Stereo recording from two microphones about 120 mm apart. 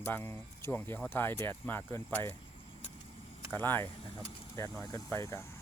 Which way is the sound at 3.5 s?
15° left (ahead or behind).